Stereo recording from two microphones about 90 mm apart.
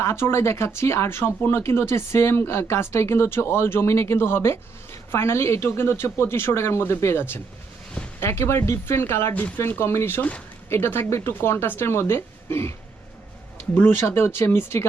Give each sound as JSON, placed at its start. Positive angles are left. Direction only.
{"t": 0.0, "sound": "speech", "side_deg": 30}
{"t": 13.7, "sound": "speech", "side_deg": 20}